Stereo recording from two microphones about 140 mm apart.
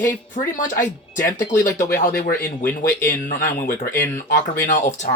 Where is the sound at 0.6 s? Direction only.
70° left (ahead or behind).